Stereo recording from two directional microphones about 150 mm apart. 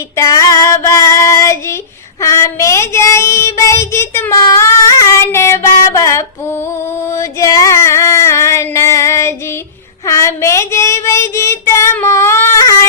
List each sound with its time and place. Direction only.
0.2 s female singing: 20° left (ahead or behind)
2.2 s child singing: 20° left (ahead or behind)
7.1 s a sound: 20° left (ahead or behind)
10.1 s child singing: 20° left (ahead or behind)